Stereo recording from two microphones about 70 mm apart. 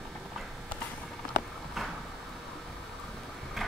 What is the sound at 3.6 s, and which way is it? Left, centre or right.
Vehicle, centre.